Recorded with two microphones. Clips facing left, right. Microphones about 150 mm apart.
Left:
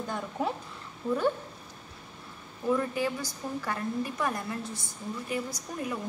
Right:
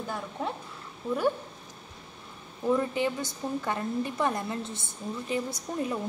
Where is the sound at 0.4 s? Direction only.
5° left (ahead or behind).